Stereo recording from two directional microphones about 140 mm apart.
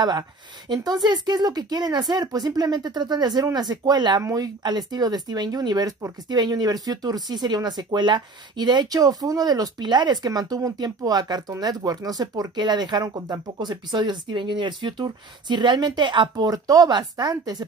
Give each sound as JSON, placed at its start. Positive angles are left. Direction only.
{"t": 0.7, "sound": "speech", "side_deg": -30}